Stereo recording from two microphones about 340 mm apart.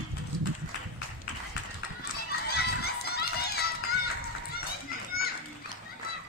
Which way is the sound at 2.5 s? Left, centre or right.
Left.